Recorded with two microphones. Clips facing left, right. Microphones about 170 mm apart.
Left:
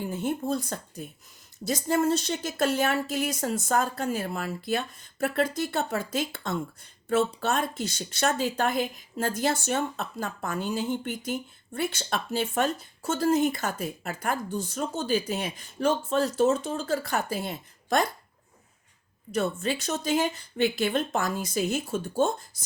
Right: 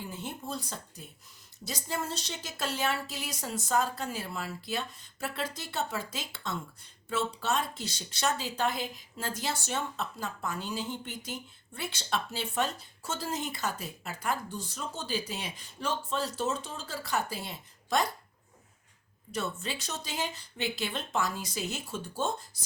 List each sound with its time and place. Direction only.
0.0 s speech: 50° left (ahead or behind)
19.3 s speech: 50° left (ahead or behind)
22.5 s a sound: 45° left (ahead or behind)